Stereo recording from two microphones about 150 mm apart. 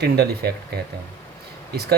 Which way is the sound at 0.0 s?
90° right.